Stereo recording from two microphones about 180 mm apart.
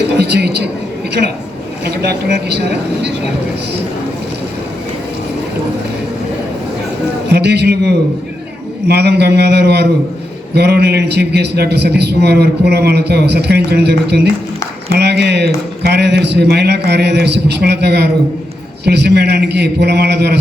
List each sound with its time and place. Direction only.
0.2 s a woman's voice: 65° right (ahead or behind)
1.8 s a man's voice: 65° right (ahead or behind)
7.3 s a man's voice: 70° right (ahead or behind)